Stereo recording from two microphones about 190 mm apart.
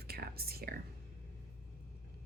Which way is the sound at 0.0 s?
55° right (ahead or behind).